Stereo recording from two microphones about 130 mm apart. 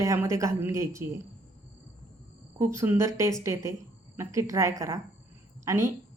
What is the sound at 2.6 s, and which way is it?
A woman's voice, 20° right (ahead or behind).